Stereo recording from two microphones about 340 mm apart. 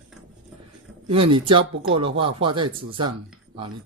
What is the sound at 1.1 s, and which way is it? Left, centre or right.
Speech, centre.